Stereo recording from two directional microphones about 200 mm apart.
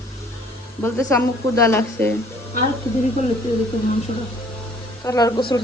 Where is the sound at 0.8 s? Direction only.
15° left (ahead or behind).